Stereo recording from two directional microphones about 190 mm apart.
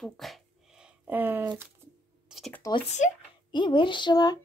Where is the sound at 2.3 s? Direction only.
Centre (ahead or behind).